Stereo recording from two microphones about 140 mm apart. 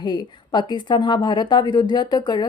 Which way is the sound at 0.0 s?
30° left (ahead or behind).